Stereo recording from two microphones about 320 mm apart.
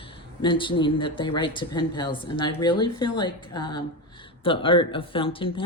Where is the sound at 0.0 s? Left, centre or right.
Centre.